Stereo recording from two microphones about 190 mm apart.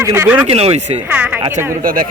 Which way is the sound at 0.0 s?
15° right (ahead or behind).